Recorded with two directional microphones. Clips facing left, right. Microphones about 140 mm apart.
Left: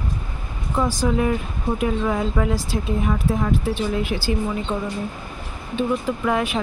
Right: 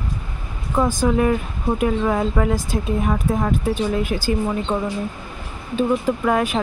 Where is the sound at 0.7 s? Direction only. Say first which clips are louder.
Right 3 dB; 50° right (ahead or behind).